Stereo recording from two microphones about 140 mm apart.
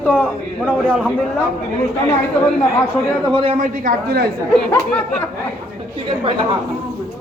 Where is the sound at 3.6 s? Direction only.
85° right.